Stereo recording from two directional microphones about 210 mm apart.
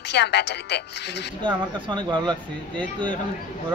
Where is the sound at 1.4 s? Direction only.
20° right (ahead or behind).